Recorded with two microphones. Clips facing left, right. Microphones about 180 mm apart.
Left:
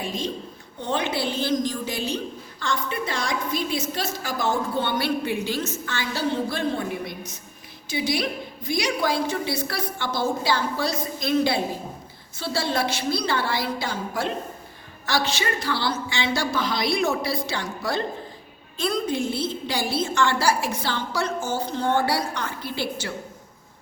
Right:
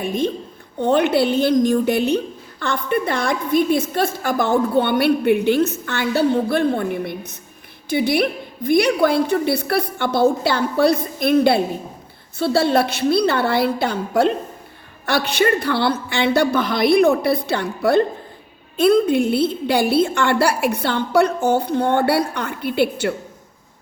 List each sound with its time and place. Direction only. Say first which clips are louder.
0.0 s a woman's voice: right 8 dB; 55° right (ahead or behind)